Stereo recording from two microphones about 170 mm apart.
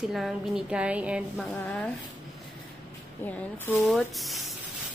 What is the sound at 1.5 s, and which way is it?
Speech, 5° left (ahead or behind).